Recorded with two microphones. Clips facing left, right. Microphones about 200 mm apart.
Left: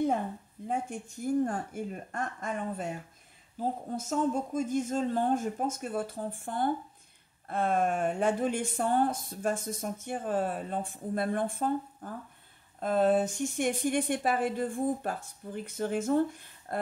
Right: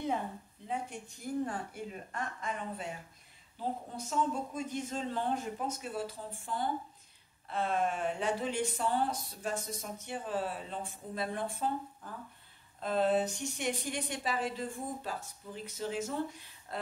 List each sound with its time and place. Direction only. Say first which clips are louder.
0.7 s speech: left 5 dB; 45° left (ahead or behind)